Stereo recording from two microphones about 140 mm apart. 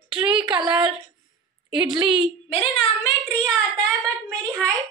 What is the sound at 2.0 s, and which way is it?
Speech, 35° right (ahead or behind).